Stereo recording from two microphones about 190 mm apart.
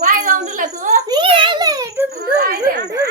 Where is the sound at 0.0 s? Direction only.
40° right (ahead or behind).